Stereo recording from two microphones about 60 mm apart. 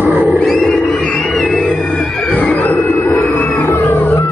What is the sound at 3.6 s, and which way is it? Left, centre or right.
Cat, left.